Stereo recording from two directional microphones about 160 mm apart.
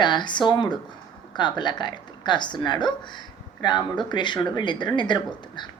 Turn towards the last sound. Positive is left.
turn(degrees=30)  # may be behind; listen again after turning